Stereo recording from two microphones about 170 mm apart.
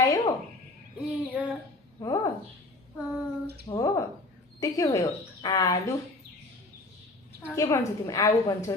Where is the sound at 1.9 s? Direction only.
20° left (ahead or behind).